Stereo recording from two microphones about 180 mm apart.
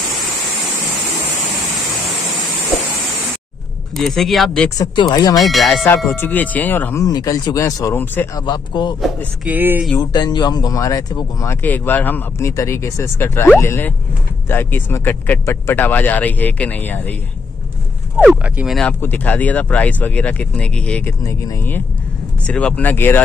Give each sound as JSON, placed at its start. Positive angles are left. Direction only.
{"t": 3.9, "sound": "speech", "side_deg": 0}
{"t": 4.6, "sound": "speech", "side_deg": 20}
{"t": 5.4, "sound": "speech", "side_deg": 0}
{"t": 6.0, "sound": "speech", "side_deg": 10}
{"t": 8.5, "sound": "speech", "side_deg": 25}
{"t": 9.0, "sound": "speech", "side_deg": -5}
{"t": 9.9, "sound": "speech", "side_deg": 25}
{"t": 11.6, "sound": "speech", "side_deg": 10}
{"t": 18.2, "sound": "speech", "side_deg": -5}
{"t": 18.8, "sound": "speech", "side_deg": 10}
{"t": 21.2, "sound": "speech", "side_deg": 15}